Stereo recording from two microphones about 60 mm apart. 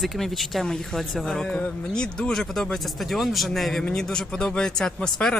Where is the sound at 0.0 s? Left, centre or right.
Centre.